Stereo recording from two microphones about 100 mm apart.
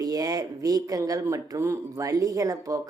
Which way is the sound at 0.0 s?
40° right (ahead or behind).